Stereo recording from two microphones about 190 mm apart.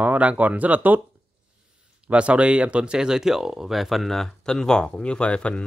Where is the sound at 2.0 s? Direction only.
5° right (ahead or behind).